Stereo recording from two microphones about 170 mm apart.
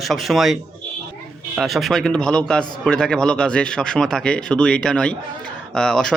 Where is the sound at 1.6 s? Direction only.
Centre (ahead or behind).